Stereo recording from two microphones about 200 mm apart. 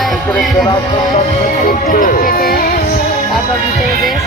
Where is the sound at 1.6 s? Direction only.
40° left (ahead or behind).